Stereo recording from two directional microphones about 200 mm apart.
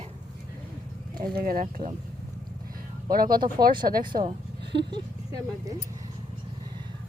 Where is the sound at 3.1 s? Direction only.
45° right (ahead or behind).